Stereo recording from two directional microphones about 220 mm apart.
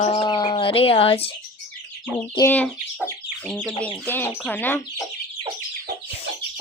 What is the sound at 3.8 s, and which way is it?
Speech, 10° left (ahead or behind).